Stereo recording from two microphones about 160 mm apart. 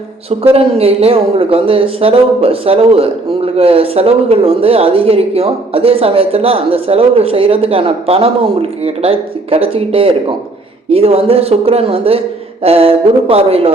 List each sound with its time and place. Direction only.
0.3 s a man's voice: 40° right (ahead or behind)